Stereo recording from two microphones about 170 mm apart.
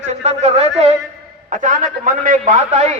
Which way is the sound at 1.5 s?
50° right (ahead or behind).